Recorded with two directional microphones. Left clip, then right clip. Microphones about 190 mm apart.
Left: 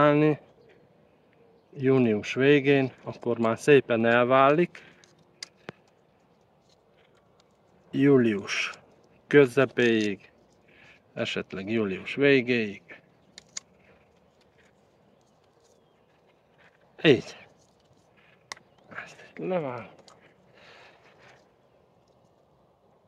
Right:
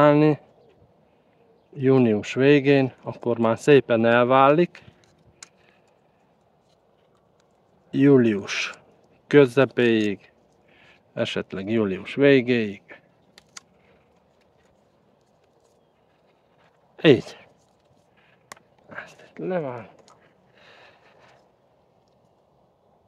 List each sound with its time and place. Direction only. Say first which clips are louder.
0.0 s a sound: right 4 dB; 50° right (ahead or behind)
1.7 s speech: right 4 dB; 50° right (ahead or behind)
7.9 s speech: right 4 dB; 50° right (ahead or behind)
16.9 s speech: right 4 dB; 50° right (ahead or behind)
18.9 s typing: right 2 dB; 60° right (ahead or behind)
20.5 s a sound: right 1 dB; 60° right (ahead or behind)